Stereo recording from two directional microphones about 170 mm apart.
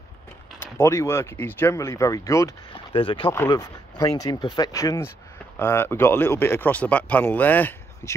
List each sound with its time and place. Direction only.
0.6 s speech: 15° left (ahead or behind)
2.9 s speech: 30° left (ahead or behind); by 8.1 s 10° left (ahead or behind)